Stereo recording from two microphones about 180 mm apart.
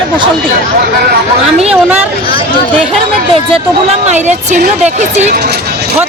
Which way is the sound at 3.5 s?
35° right (ahead or behind).